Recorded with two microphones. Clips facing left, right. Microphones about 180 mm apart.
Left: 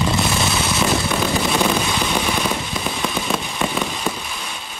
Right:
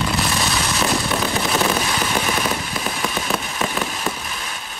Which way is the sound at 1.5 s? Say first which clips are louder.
Left 1 dB; centre (ahead or behind).